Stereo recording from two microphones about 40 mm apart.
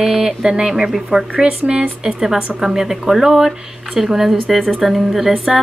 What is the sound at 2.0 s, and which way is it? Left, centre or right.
Speech, centre.